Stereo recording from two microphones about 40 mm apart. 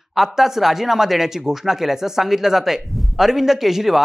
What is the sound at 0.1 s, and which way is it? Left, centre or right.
Speech, centre.